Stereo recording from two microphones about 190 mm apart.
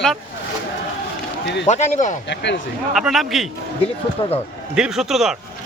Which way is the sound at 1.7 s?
35° left (ahead or behind).